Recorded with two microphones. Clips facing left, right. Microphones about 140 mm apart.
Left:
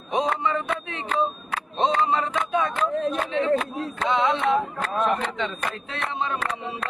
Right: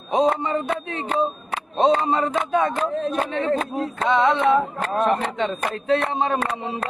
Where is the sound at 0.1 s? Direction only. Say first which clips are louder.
Right 4 dB; 30° right (ahead or behind).